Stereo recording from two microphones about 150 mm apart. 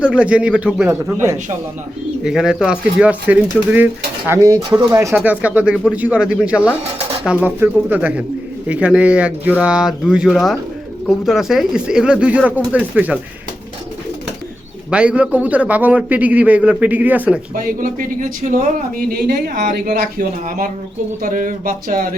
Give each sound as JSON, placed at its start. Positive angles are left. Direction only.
{"t": 0.0, "sound": "a man's voice", "side_deg": -10}
{"t": 2.2, "sound": "a man's voice", "side_deg": -5}
{"t": 4.3, "sound": "a man's voice", "side_deg": -20}
{"t": 14.8, "sound": "a man's voice", "side_deg": -10}
{"t": 17.5, "sound": "speech", "side_deg": -65}